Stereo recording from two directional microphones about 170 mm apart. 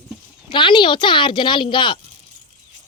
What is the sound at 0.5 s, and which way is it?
Speech, 30° left (ahead or behind).